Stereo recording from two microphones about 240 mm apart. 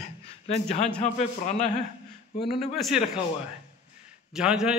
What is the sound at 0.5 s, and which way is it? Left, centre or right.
A man's voice, left.